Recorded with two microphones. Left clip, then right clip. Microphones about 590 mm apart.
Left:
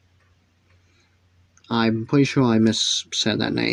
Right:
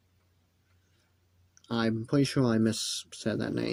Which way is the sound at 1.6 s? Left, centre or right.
Right.